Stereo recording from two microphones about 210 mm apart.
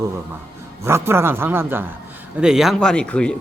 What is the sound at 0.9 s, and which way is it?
Speech, 10° right (ahead or behind).